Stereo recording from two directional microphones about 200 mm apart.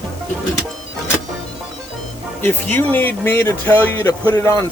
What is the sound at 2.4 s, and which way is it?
Speech, 10° left (ahead or behind).